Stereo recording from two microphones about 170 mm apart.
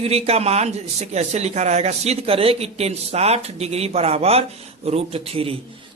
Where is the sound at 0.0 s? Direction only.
35° right (ahead or behind).